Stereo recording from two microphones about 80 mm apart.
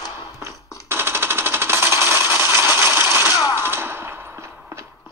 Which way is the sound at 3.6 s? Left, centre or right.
Right.